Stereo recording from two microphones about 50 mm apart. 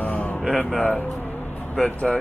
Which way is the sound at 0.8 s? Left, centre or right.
Centre.